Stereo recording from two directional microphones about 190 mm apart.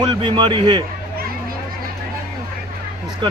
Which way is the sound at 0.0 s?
25° right (ahead or behind).